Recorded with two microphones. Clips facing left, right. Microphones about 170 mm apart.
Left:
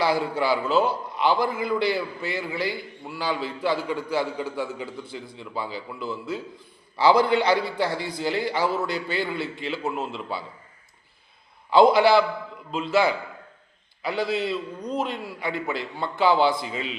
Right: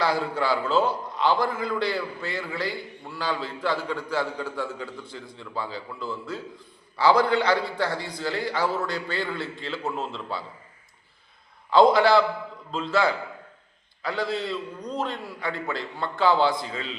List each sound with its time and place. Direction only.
0.0 s a man's voice: 15° left (ahead or behind)
11.7 s a man's voice: 5° left (ahead or behind)
14.0 s a man's voice: 15° left (ahead or behind)